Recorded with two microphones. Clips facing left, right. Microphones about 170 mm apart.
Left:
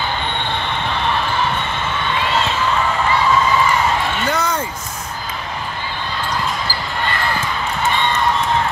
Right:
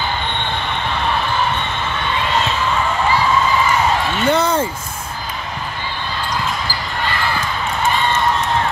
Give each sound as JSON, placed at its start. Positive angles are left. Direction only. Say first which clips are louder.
{"t": 4.3, "sound": "speech", "louder": "right 7 dB", "side_deg": -25}